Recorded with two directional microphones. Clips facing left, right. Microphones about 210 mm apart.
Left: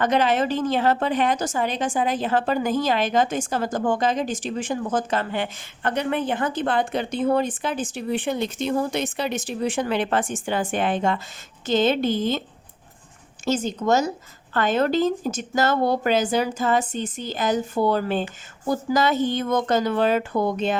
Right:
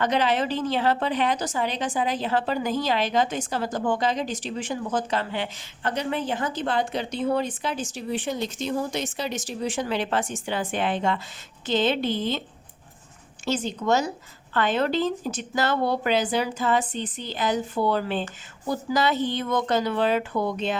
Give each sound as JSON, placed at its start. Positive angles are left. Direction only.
{"t": 0.0, "sound": "a woman's voice", "side_deg": 50}
{"t": 13.4, "sound": "a woman's voice", "side_deg": 45}